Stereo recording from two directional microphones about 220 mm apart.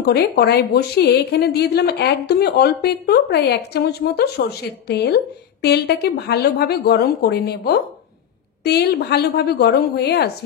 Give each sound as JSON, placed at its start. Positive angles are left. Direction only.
{"t": 0.0, "sound": "a woman's voice", "side_deg": 45}